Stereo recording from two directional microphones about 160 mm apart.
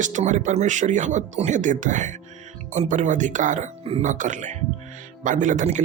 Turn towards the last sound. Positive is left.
turn(degrees=-50)  # may be behind; listen again after turning